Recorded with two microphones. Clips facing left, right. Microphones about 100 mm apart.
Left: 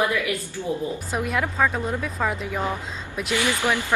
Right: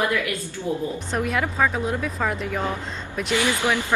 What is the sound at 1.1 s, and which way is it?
Speech, centre (ahead or behind).